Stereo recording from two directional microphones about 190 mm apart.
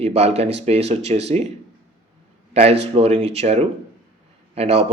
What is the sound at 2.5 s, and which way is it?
A man's voice, 35° right (ahead or behind).